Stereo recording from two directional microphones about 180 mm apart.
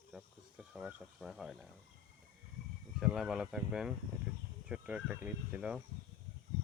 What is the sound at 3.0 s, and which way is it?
Speech, centre (ahead or behind).